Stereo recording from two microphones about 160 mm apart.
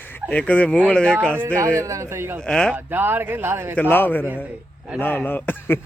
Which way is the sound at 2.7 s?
10° right (ahead or behind).